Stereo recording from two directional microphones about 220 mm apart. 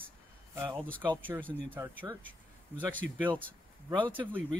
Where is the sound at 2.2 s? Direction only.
5° left (ahead or behind).